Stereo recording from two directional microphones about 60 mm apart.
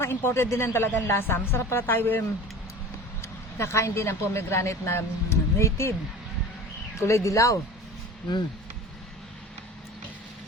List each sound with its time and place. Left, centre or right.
0.0 s speech: left
3.2 s a woman's voice: left
7.0 s speech: left